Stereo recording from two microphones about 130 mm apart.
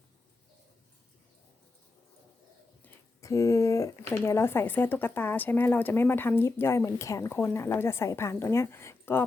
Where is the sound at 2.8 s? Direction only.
25° left (ahead or behind).